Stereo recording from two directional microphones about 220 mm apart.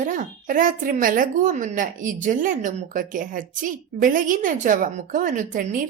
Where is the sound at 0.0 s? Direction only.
35° right (ahead or behind).